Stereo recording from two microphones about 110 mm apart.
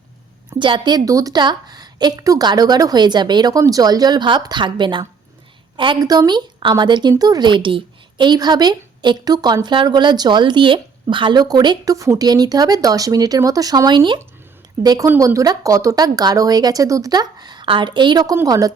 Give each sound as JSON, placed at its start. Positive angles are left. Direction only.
{"t": 0.6, "sound": "a woman's voice", "side_deg": -45}
{"t": 14.8, "sound": "a woman's voice", "side_deg": -30}